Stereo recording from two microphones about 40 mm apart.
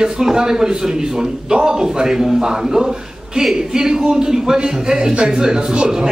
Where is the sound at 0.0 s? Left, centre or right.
Centre.